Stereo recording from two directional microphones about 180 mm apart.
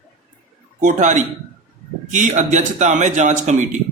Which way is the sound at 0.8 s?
45° right (ahead or behind).